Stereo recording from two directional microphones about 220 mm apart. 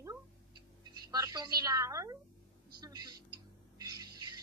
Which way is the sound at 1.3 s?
15° right (ahead or behind).